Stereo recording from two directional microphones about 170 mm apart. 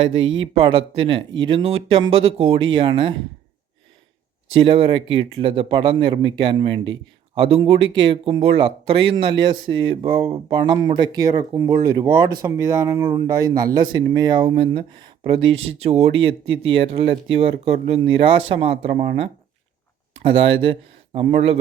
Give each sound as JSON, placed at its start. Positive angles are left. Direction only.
{"t": 0.5, "sound": "speech", "side_deg": -30}
{"t": 4.5, "sound": "speech", "side_deg": -30}